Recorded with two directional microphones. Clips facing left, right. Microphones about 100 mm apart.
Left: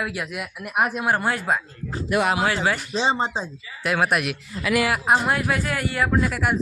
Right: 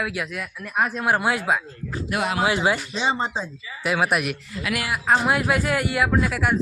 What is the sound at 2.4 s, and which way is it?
Speech, 20° right (ahead or behind).